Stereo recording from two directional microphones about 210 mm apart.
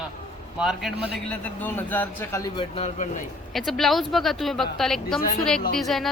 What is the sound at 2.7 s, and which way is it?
Speech, 35° left (ahead or behind).